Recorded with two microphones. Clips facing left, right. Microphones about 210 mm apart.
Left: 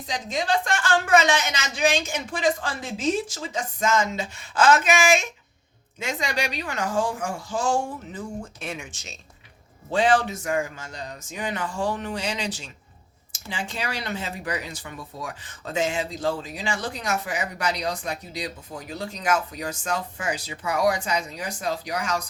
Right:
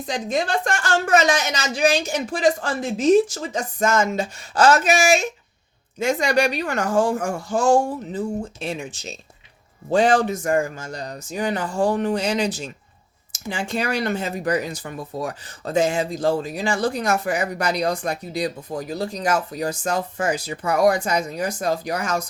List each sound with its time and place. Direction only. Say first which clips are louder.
0.0 s a woman's voice: right 5 dB; 55° right (ahead or behind)
8.4 s a woman's voice: right 6 dB; 30° right (ahead or behind); by 22.2 s 45° right (ahead or behind)